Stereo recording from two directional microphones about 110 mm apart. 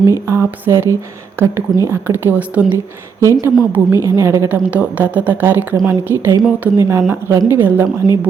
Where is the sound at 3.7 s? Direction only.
25° right (ahead or behind).